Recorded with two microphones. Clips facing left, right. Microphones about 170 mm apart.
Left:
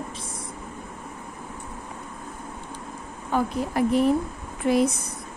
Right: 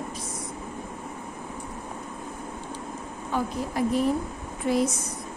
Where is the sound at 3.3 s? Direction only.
65° left (ahead or behind).